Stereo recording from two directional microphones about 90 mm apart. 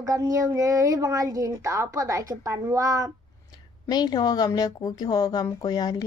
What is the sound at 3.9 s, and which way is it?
A woman's voice, 50° left (ahead or behind).